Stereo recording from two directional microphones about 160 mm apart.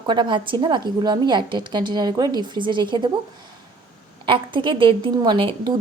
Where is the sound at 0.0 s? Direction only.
30° right (ahead or behind).